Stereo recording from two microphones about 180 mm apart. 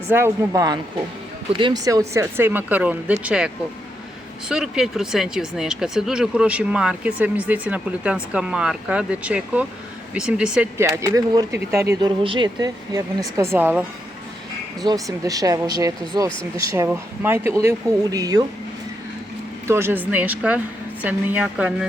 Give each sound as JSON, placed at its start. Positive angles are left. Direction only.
{"t": 0.1, "sound": "speech", "side_deg": -15}
{"t": 10.8, "sound": "speech", "side_deg": -20}
{"t": 14.8, "sound": "speech", "side_deg": -20}
{"t": 19.6, "sound": "speech", "side_deg": -15}